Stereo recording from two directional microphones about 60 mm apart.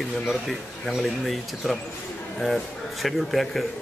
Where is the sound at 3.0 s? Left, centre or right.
Centre.